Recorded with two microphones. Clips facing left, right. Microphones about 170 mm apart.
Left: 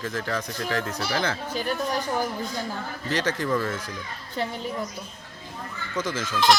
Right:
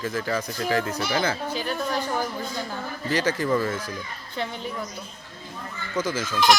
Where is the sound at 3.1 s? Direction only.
5° right (ahead or behind).